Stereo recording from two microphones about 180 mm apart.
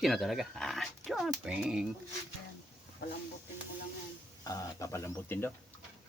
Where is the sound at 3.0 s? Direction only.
60° left (ahead or behind).